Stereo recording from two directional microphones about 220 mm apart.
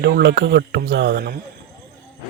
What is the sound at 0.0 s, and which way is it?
Speech, 50° right (ahead or behind).